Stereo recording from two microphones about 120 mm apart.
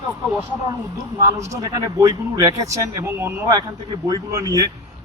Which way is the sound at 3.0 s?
15° right (ahead or behind).